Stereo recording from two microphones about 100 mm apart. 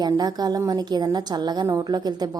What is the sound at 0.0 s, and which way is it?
A woman's voice, 40° right (ahead or behind).